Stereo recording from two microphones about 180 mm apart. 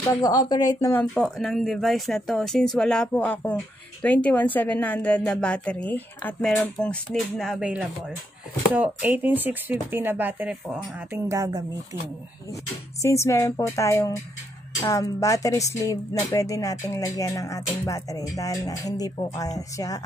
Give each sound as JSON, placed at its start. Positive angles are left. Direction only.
{"t": 0.2, "sound": "a woman's voice", "side_deg": 20}
{"t": 11.2, "sound": "speech", "side_deg": -20}
{"t": 13.0, "sound": "a woman's voice", "side_deg": 15}